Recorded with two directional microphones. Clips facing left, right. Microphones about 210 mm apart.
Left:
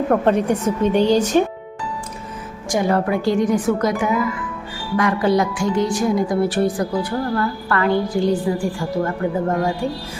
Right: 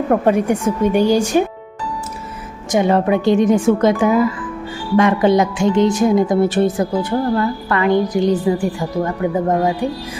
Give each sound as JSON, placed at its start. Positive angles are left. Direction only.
{"t": 0.1, "sound": "speech", "side_deg": -10}
{"t": 2.7, "sound": "a woman's voice", "side_deg": -20}